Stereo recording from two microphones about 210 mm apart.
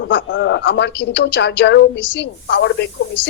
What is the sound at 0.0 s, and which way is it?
A woman's voice, 65° left (ahead or behind).